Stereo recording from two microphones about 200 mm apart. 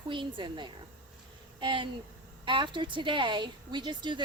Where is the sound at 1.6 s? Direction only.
25° right (ahead or behind).